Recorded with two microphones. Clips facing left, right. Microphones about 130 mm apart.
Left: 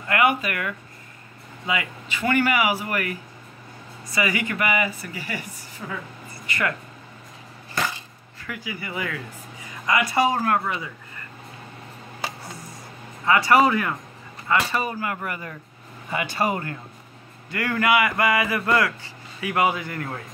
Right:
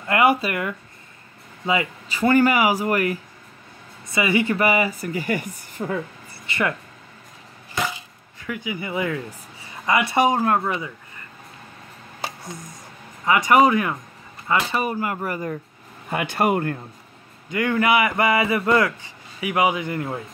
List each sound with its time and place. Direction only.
0.1 s speech: 35° right (ahead or behind)
4.1 s speech: 25° right (ahead or behind); by 5.9 s 50° right (ahead or behind)
6.3 s a sound: 25° right (ahead or behind)
8.5 s speech: 20° right (ahead or behind)
13.2 s speech: 15° right (ahead or behind); by 15.5 s 35° right (ahead or behind)
16.1 s speech: 55° right (ahead or behind)
17.5 s speech: 20° right (ahead or behind)